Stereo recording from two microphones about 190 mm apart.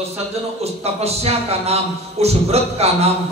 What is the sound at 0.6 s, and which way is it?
A man's voice, 35° right (ahead or behind).